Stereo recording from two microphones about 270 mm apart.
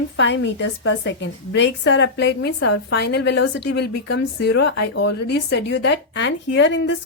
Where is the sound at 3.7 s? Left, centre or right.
Left.